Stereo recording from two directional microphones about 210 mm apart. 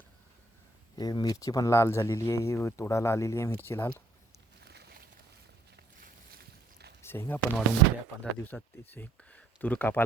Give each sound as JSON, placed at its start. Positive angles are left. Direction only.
{"t": 0.9, "sound": "speech", "side_deg": 20}
{"t": 4.6, "sound": "a sound", "side_deg": -50}
{"t": 5.7, "sound": "boat", "side_deg": -50}
{"t": 7.0, "sound": "speech", "side_deg": 10}